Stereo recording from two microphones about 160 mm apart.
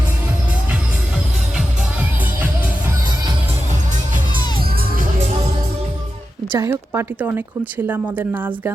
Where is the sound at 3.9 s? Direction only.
55° right (ahead or behind).